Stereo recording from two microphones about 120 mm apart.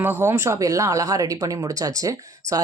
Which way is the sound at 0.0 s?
20° right (ahead or behind).